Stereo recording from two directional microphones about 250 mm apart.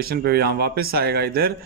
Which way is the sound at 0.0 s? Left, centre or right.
Right.